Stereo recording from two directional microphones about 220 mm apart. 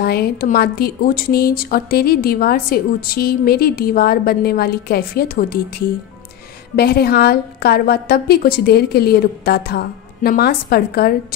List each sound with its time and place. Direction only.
0.0 s speech: 45° left (ahead or behind)
6.7 s speech: 45° left (ahead or behind)